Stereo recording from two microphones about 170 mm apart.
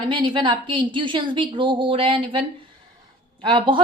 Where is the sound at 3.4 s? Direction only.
30° right (ahead or behind).